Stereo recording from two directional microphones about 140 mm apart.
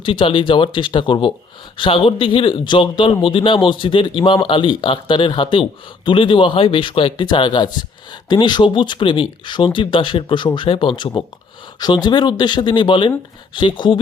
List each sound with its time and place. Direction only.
0.0 s speech: 40° left (ahead or behind)